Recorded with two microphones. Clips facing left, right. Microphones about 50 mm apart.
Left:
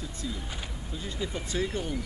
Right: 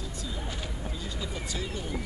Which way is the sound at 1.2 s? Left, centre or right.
Left.